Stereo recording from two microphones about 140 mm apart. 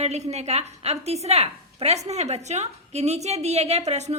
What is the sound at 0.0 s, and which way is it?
A woman's voice, 50° right (ahead or behind).